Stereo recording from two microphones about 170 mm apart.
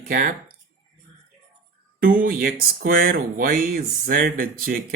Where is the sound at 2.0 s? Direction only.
55° right (ahead or behind).